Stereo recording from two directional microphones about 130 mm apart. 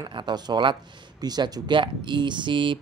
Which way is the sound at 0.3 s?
35° right (ahead or behind).